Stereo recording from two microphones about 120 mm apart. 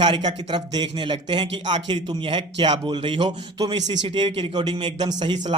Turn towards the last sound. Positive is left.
turn(degrees=-40)  # may be behind; listen again after turning